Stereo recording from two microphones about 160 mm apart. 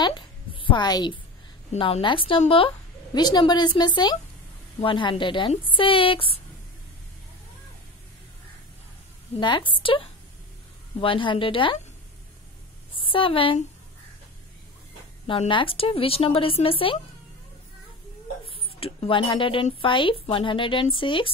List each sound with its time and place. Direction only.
0.0 s a sound: 30° left (ahead or behind)
1.7 s a woman's voice: 35° left (ahead or behind)
9.4 s speech: 30° left (ahead or behind)
12.9 s a woman's voice: 35° left (ahead or behind)
15.2 s speech: 35° left (ahead or behind)
18.8 s speech: 35° left (ahead or behind)